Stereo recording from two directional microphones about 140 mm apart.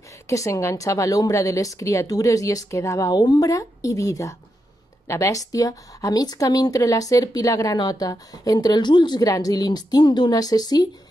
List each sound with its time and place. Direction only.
0.3 s speech: 20° left (ahead or behind)